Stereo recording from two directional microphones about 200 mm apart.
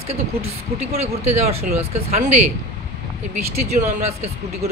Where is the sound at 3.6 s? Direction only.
35° right (ahead or behind).